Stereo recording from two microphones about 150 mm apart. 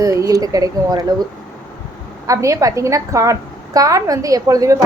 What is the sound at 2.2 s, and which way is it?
Speech, 20° right (ahead or behind).